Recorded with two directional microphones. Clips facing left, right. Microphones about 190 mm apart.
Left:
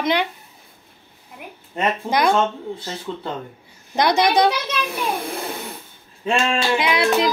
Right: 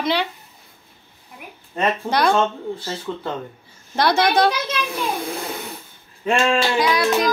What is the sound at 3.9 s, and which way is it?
Speech, 15° left (ahead or behind).